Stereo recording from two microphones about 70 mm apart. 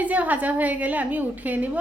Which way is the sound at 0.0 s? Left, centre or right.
Right.